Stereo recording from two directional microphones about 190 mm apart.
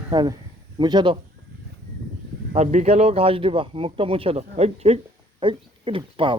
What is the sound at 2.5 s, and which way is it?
A man's voice, 35° right (ahead or behind).